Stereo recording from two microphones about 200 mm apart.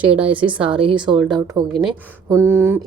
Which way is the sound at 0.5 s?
25° right (ahead or behind).